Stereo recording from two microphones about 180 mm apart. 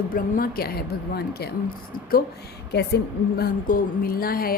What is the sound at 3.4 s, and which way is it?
A woman's voice, 55° left (ahead or behind).